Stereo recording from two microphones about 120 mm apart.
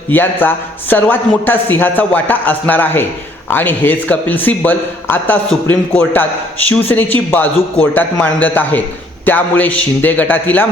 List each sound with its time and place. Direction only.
0.1 s speech: 15° left (ahead or behind)